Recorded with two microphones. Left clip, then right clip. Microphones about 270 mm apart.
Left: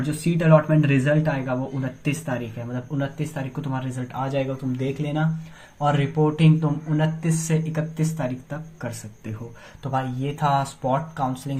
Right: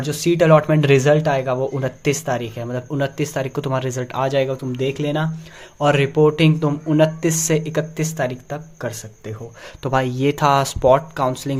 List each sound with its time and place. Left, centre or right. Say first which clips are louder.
0.3 s speech: right 6 dB; right